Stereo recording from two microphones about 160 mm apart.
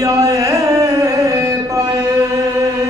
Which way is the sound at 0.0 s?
20° right (ahead or behind).